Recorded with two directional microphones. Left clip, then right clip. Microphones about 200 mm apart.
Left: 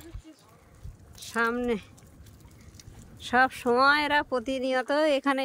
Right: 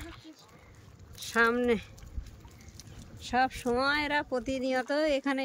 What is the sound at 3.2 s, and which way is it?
Speech, 10° left (ahead or behind).